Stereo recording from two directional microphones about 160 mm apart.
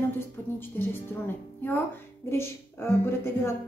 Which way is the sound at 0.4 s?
15° left (ahead or behind).